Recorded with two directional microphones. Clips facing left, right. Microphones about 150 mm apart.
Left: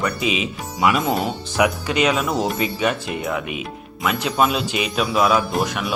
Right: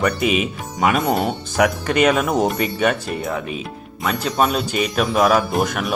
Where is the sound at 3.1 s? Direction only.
35° right (ahead or behind).